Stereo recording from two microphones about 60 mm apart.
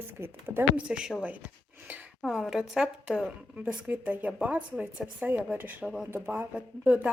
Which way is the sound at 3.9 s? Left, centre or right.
Right.